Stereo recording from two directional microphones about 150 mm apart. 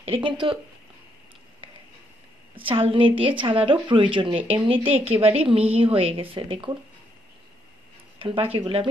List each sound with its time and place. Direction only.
0.0 s a woman's voice: 35° right (ahead or behind)
2.5 s a woman's voice: 35° right (ahead or behind)
8.2 s a woman's voice: 35° right (ahead or behind)